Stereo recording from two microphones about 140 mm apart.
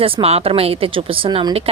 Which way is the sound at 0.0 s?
45° right (ahead or behind).